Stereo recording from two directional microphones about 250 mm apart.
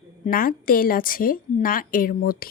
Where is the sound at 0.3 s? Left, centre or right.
Left.